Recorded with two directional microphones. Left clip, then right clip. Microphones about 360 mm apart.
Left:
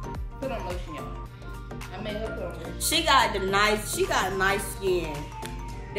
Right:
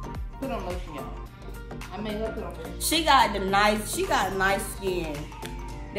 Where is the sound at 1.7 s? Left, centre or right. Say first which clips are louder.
Right 1 dB; centre.